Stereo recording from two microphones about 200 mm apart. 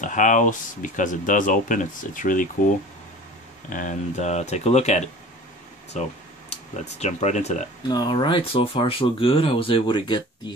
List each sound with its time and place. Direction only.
0.0 s speech: 40° left (ahead or behind)
3.7 s speech: 35° left (ahead or behind)
6.5 s speech: 30° left (ahead or behind)
7.9 s speech: 20° left (ahead or behind)